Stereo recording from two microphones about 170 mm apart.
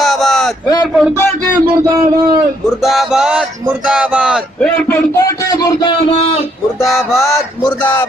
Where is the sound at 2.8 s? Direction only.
Centre (ahead or behind).